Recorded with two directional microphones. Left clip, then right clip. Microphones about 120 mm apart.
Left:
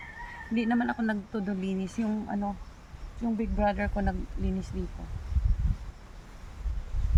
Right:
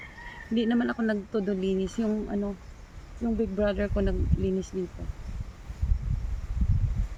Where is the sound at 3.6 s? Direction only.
30° left (ahead or behind).